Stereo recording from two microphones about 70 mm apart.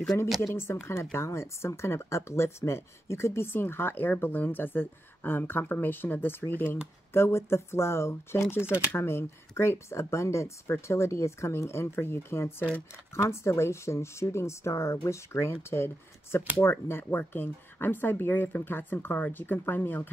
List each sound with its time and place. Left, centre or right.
0.7 s speech: left